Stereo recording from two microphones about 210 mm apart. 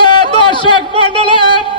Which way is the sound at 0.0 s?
20° left (ahead or behind).